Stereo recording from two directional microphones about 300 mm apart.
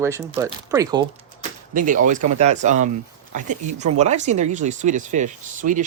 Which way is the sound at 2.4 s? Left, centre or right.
Right.